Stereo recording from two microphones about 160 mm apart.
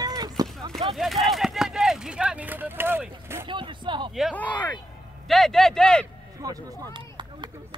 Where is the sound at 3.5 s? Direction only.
30° right (ahead or behind).